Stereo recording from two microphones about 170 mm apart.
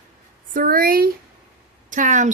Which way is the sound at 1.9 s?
50° right (ahead or behind).